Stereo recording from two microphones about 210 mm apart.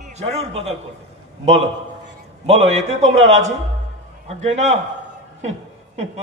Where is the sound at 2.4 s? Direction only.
30° right (ahead or behind).